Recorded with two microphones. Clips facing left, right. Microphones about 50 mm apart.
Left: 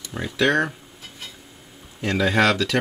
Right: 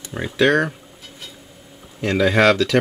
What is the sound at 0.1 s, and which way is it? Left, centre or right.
Speech, centre.